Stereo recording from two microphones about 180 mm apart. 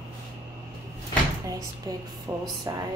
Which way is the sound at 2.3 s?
20° right (ahead or behind).